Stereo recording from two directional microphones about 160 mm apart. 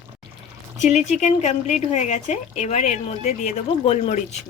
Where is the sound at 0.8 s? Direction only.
45° left (ahead or behind).